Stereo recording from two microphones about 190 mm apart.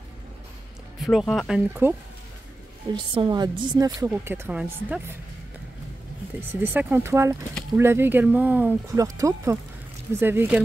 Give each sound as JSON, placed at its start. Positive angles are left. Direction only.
{"t": 1.0, "sound": "speech", "side_deg": 0}
{"t": 2.9, "sound": "a woman's voice", "side_deg": -25}
{"t": 6.5, "sound": "speech", "side_deg": -10}